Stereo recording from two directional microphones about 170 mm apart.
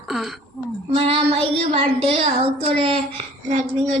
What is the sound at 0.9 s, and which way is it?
A woman's voice, 35° right (ahead or behind).